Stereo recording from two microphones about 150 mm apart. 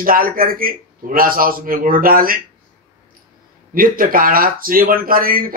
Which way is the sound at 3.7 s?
70° right (ahead or behind).